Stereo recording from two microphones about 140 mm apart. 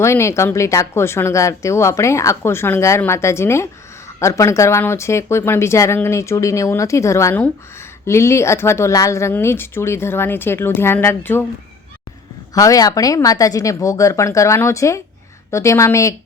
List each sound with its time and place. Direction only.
0.0 s speech: 20° left (ahead or behind)
12.5 s speech: 25° left (ahead or behind)